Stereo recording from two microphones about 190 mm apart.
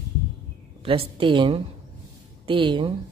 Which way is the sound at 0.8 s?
30° right (ahead or behind).